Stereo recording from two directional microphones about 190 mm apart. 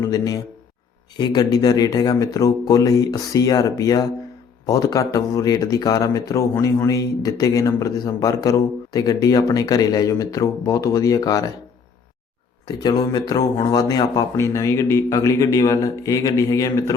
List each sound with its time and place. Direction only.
0.0 s speech: 20° left (ahead or behind)
12.6 s speech: 20° left (ahead or behind)